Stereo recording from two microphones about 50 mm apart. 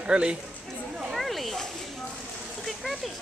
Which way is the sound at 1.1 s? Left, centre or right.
Centre.